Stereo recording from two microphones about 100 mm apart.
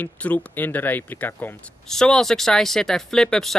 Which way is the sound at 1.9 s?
5° left (ahead or behind).